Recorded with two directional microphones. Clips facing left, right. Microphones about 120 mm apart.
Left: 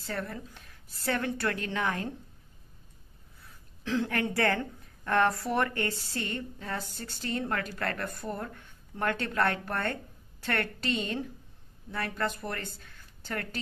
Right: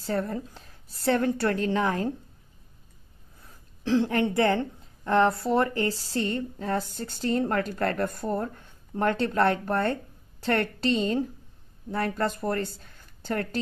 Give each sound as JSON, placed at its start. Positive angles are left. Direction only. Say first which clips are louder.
{"t": 0.0, "sound": "a woman's voice", "louder": "right 7 dB", "side_deg": -35}
{"t": 3.4, "sound": "a woman's voice", "louder": "right 7 dB", "side_deg": -30}